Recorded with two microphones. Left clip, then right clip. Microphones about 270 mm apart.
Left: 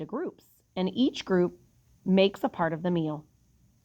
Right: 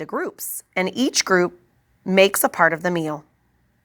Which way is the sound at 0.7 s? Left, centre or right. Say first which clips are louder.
Right 8 dB; right.